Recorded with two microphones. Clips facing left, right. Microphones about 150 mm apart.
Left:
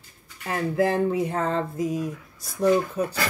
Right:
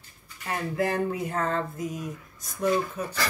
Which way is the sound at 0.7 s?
30° left (ahead or behind).